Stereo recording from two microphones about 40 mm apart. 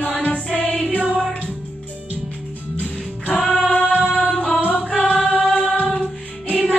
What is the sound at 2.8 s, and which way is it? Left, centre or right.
Music, left.